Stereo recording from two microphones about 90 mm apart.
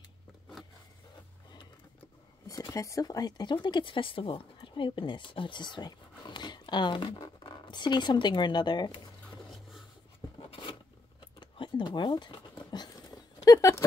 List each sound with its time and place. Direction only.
2.7 s speech: 35° left (ahead or behind)
3.5 s speech: 65° left (ahead or behind)
11.3 s a sound: 65° left (ahead or behind)
13.5 s speech: 35° left (ahead or behind)